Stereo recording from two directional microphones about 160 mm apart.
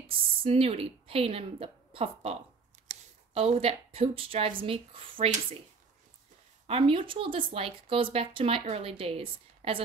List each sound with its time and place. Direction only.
0.1 s a woman's voice: 35° right (ahead or behind)
6.7 s speech: 35° right (ahead or behind)